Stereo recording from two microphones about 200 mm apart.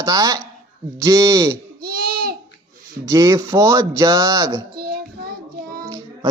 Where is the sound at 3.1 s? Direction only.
15° right (ahead or behind).